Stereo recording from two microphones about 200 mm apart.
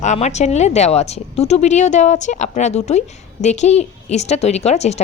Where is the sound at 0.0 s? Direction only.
35° left (ahead or behind).